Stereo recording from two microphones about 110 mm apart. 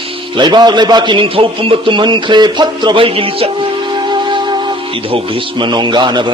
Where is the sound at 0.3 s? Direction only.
45° right (ahead or behind).